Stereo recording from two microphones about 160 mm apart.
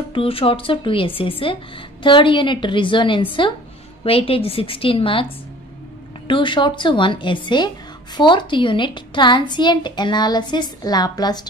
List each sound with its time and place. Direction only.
0.1 s a woman's voice: 35° left (ahead or behind)
6.2 s a woman's voice: 30° left (ahead or behind)